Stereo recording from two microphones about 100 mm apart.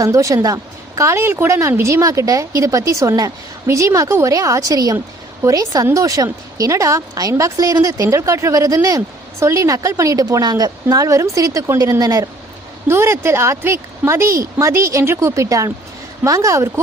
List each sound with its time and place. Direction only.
0.0 s a woman's voice: 35° right (ahead or behind)
12.9 s a woman's voice: 25° right (ahead or behind)